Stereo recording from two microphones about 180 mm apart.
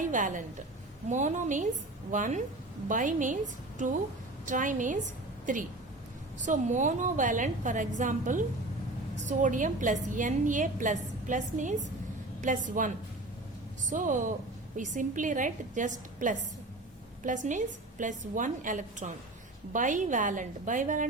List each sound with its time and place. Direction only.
0.0 s a woman's voice: 45° right (ahead or behind)
13.9 s a woman's voice: 45° right (ahead or behind)